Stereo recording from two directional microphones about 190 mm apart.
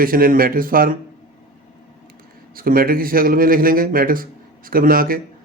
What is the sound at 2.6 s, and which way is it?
Speech, 50° right (ahead or behind).